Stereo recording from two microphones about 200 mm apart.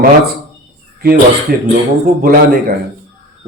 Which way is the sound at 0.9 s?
50° right (ahead or behind).